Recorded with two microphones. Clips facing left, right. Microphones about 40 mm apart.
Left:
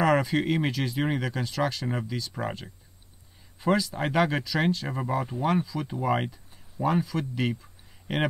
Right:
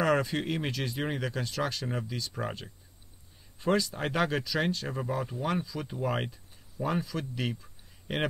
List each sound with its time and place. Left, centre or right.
0.0 s speech: centre